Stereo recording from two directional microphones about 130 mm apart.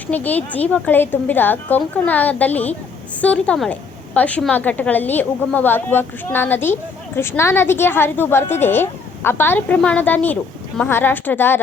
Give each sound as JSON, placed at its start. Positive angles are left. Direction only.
{"t": 0.1, "sound": "a woman's voice", "side_deg": 15}